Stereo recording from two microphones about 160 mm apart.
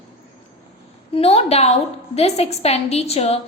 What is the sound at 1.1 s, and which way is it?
A woman's voice, 40° left (ahead or behind).